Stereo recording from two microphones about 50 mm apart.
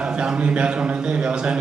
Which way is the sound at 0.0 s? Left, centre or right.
Centre.